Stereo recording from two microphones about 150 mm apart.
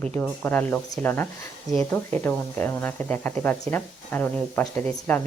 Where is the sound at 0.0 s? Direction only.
10° left (ahead or behind).